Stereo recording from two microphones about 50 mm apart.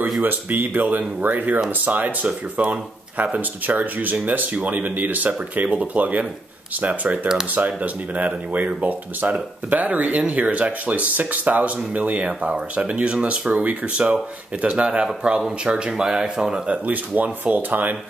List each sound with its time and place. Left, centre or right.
0.2 s speech: right; by 16.6 s centre
16.6 s speech: right